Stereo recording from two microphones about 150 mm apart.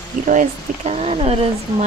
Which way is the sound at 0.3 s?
50° right (ahead or behind).